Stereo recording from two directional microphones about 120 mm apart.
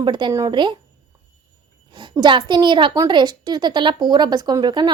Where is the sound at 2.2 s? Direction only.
40° right (ahead or behind).